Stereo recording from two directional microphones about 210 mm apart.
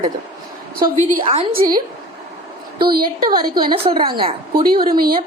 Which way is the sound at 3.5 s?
20° right (ahead or behind).